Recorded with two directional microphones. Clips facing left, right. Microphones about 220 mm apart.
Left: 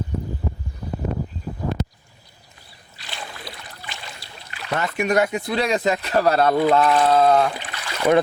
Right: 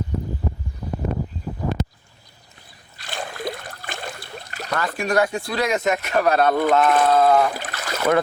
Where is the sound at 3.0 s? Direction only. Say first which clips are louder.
Right 8 dB; 50° right (ahead or behind).